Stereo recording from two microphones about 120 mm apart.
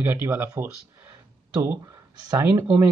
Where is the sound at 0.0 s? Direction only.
15° right (ahead or behind).